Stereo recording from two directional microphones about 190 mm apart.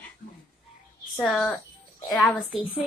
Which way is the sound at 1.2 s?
5° left (ahead or behind).